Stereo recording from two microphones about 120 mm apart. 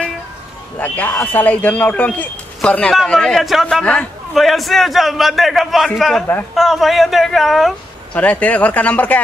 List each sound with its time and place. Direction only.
0.7 s a man's voice: 15° left (ahead or behind)
8.1 s speech: 10° left (ahead or behind)